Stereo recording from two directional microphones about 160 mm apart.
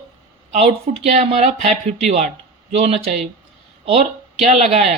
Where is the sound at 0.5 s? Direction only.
45° right (ahead or behind).